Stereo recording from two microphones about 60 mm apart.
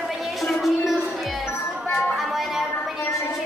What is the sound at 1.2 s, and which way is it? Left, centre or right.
Music, centre.